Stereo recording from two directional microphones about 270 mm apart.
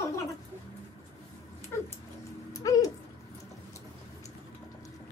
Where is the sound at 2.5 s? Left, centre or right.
Centre.